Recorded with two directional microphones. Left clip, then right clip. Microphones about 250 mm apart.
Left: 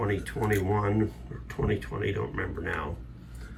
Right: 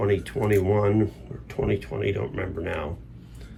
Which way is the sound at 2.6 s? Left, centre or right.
Right.